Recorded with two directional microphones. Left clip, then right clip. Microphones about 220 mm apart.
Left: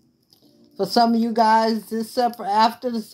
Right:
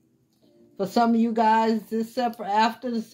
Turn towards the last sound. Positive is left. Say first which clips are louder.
# left 4 dB
turn(degrees=45)  # may be behind; listen again after turning